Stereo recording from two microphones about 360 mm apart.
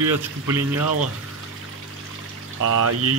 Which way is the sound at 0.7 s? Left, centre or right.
Right.